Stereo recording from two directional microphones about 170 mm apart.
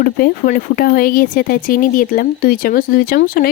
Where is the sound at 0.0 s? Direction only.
60° left (ahead or behind).